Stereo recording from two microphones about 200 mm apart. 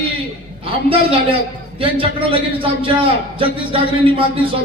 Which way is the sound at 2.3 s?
25° right (ahead or behind).